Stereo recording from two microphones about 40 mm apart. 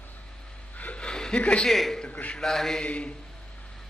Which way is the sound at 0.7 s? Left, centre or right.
Left.